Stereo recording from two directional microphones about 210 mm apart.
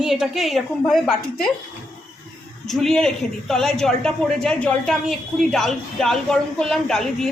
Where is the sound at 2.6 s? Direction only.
Centre (ahead or behind).